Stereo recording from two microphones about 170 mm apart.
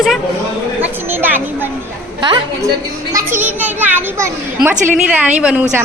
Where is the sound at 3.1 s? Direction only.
10° right (ahead or behind).